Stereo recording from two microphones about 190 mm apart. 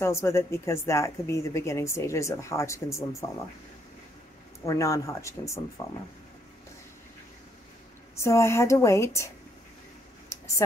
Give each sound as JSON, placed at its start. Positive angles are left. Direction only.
{"t": 0.0, "sound": "a woman's voice", "side_deg": 15}
{"t": 4.6, "sound": "a woman's voice", "side_deg": 15}
{"t": 8.2, "sound": "a woman's voice", "side_deg": 15}
{"t": 10.3, "sound": "a sound", "side_deg": 15}